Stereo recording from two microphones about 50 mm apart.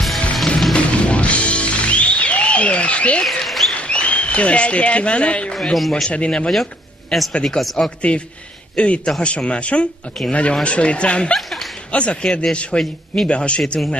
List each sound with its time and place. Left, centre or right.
0.0 s music: centre
0.7 s music: left
3.3 s a sound: centre
3.8 s speech: left
5.5 s speech: centre
6.0 s speech: left
6.5 s speech: centre
8.7 s a man's voice: left